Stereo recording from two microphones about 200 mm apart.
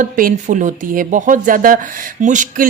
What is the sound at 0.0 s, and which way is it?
Speech, 45° right (ahead or behind).